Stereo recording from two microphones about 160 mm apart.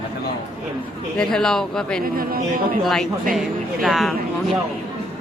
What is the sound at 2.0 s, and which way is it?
Speech, 65° right (ahead or behind).